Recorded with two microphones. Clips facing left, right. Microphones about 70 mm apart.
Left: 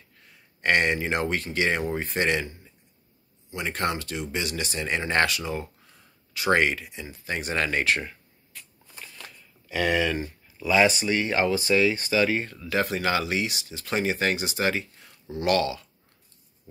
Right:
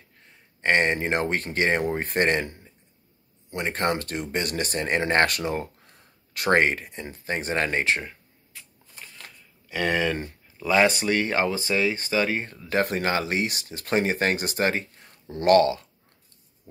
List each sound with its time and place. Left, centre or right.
0.6 s speech: right
0.9 s speech: right; by 8.6 s centre
9.8 s speech: right